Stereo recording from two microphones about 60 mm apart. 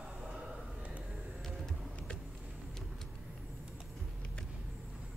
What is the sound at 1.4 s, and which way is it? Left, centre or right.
Vehicle, centre.